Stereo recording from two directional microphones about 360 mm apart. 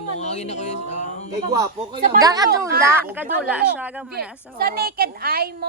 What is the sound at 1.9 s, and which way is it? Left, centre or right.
Speech, right.